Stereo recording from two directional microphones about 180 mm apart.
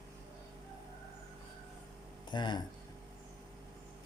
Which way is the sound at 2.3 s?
25° left (ahead or behind).